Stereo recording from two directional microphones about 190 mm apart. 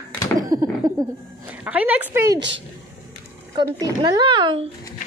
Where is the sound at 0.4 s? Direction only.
20° right (ahead or behind).